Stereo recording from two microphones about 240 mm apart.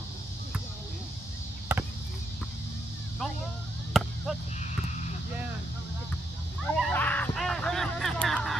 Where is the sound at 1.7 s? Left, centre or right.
Centre.